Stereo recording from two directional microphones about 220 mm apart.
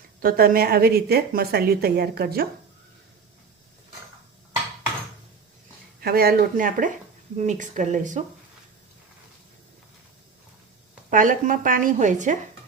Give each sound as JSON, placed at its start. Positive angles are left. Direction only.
{"t": 0.2, "sound": "a woman's voice", "side_deg": -40}
{"t": 6.0, "sound": "a woman's voice", "side_deg": -45}
{"t": 11.1, "sound": "a woman's voice", "side_deg": -35}